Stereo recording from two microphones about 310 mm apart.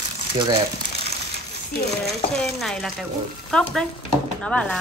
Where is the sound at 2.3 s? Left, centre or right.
Centre.